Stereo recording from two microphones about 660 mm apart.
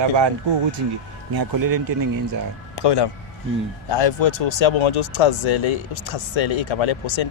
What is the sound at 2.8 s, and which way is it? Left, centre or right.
Speech, left.